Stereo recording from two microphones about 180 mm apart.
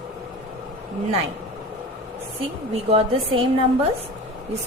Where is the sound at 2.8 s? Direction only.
35° right (ahead or behind).